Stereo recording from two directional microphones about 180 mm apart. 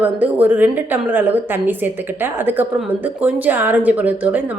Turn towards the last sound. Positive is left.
turn(degrees=-10)  # may be behind; listen again after turning